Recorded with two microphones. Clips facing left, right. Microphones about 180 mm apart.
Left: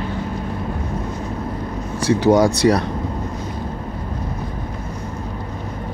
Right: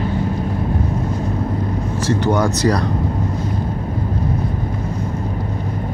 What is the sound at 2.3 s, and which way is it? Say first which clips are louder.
Speech: left 3 dB; 35° left (ahead or behind).